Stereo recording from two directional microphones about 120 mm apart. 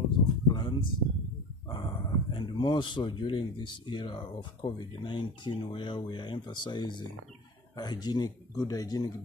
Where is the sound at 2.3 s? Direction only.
45° left (ahead or behind).